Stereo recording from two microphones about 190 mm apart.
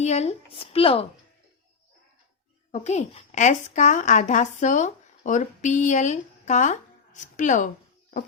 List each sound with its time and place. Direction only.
0.0 s speech: 35° left (ahead or behind)
2.8 s a child's voice: 35° left (ahead or behind)